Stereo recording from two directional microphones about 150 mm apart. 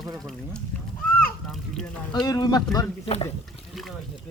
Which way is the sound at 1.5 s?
Centre (ahead or behind).